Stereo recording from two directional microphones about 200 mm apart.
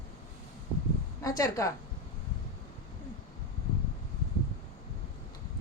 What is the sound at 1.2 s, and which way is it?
Speech, 15° left (ahead or behind).